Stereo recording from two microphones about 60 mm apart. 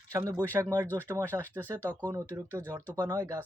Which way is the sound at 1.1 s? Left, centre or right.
Right.